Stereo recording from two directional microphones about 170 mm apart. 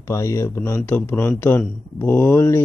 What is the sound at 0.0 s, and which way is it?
A man's voice, 15° left (ahead or behind).